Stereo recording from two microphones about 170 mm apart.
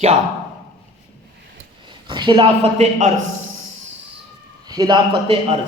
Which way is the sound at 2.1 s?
30° right (ahead or behind).